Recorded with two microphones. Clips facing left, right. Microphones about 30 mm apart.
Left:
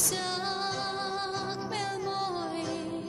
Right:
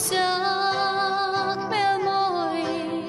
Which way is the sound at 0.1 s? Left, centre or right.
Right.